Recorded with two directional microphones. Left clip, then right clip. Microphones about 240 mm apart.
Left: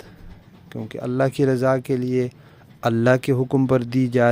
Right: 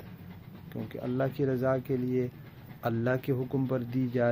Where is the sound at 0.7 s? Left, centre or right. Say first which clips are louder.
Left 9 dB; left.